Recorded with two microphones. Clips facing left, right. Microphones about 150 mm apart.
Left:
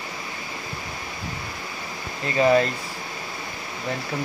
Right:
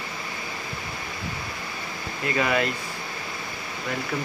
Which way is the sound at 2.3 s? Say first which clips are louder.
Left 6 dB; 35° left (ahead or behind).